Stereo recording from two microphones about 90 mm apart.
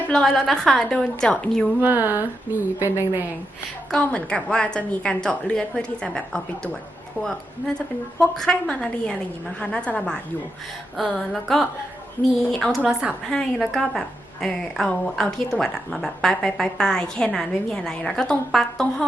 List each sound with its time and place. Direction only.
0.1 s a woman's voice: 5° left (ahead or behind)
1.8 s a woman's voice: 20° right (ahead or behind)
3.9 s a woman's voice: 10° left (ahead or behind)
10.9 s speech: centre (ahead or behind)
12.8 s a woman's voice: 10° right (ahead or behind)
13.2 s speech: centre (ahead or behind)